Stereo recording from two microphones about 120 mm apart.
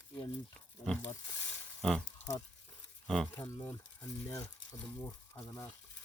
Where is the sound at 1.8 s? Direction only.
5° left (ahead or behind).